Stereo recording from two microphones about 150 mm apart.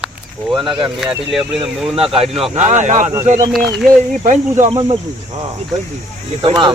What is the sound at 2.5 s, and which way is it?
Speech, 50° right (ahead or behind).